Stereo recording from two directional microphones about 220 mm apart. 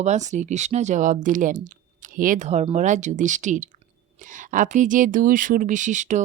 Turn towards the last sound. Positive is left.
turn(degrees=-35)  # may be behind; listen again after turning